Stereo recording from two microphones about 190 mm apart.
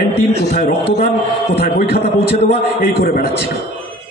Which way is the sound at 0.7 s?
55° left (ahead or behind).